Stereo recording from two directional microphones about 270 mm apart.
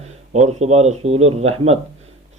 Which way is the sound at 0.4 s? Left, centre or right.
Right.